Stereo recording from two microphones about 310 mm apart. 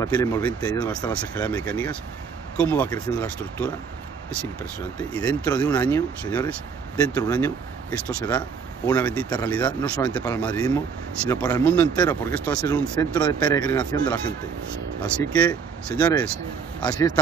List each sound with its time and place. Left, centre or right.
0.0 s speech: centre
4.9 s speech: centre
15.0 s speech: centre